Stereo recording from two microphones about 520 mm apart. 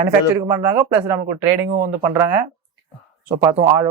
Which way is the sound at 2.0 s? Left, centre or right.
Right.